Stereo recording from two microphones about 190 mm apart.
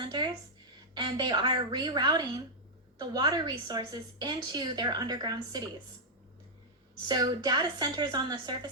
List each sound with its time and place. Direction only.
0.0 s a sound: 25° right (ahead or behind)
0.9 s a woman's voice: 20° right (ahead or behind)
7.1 s a woman's voice: 20° right (ahead or behind)